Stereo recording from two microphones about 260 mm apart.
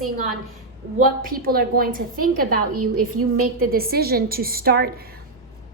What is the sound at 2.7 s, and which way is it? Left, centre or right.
Speech, right.